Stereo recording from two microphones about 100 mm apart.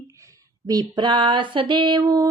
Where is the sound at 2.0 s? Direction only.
35° right (ahead or behind).